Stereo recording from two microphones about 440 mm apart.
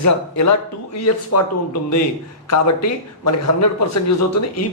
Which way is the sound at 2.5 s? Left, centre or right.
Left.